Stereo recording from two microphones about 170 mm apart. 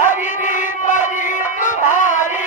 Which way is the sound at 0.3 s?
50° left (ahead or behind).